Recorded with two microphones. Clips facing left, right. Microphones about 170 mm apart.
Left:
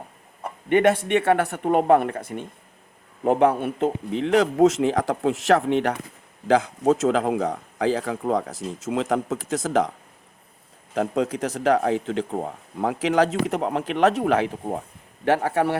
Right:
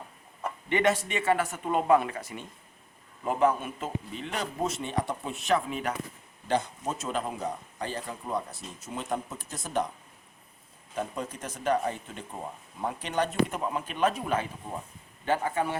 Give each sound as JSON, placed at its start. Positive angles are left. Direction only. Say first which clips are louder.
{"t": 0.7, "sound": "speech", "louder": "left 8 dB", "side_deg": 55}
{"t": 3.2, "sound": "speech", "louder": "left 7 dB", "side_deg": 65}
{"t": 6.5, "sound": "speech", "louder": "left 10 dB", "side_deg": 90}
{"t": 10.9, "sound": "speech", "louder": "left 11 dB", "side_deg": 85}
{"t": 12.4, "sound": "speech", "louder": "left 8 dB", "side_deg": 70}